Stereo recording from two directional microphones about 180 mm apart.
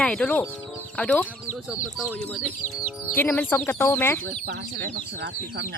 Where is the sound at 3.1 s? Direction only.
5° left (ahead or behind).